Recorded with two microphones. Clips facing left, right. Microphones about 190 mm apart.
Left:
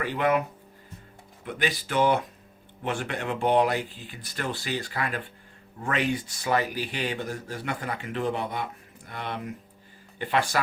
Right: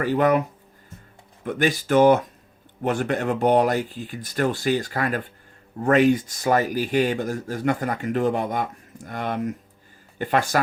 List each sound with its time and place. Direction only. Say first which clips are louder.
0.0 s speech: right 5 dB; 45° right (ahead or behind)
1.5 s speech: right 8 dB; 45° right (ahead or behind)